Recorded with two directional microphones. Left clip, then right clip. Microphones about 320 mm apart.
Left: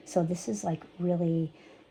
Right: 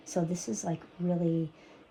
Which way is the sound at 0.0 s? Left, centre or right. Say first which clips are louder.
Left 4 dB; left.